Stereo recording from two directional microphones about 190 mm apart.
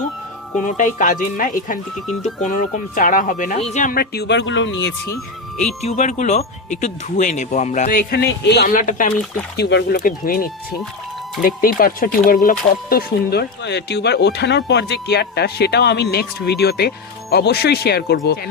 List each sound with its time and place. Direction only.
0.8 s speech: 45° left (ahead or behind); by 4.9 s 75° left (ahead or behind)
5.5 s speech: 35° left (ahead or behind)
9.6 s speech: 60° left (ahead or behind)
10.0 s speech: 45° left (ahead or behind)